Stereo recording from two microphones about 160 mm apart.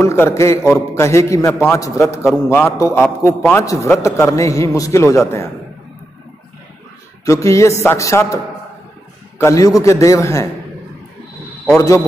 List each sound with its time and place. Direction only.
0.0 s a man's voice: 15° left (ahead or behind)
7.2 s a man's voice: 20° left (ahead or behind)
9.4 s a man's voice: 20° left (ahead or behind)